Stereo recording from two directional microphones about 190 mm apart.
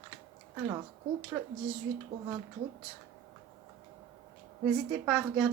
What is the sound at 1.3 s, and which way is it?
Speech, 10° right (ahead or behind).